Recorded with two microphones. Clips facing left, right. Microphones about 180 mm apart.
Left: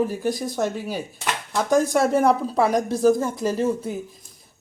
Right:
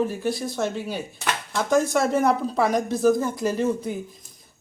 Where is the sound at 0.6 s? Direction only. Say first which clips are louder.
Left 1 dB; 10° left (ahead or behind).